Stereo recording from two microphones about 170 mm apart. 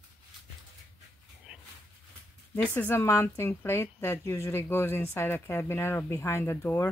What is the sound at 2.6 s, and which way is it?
Speech, 10° left (ahead or behind).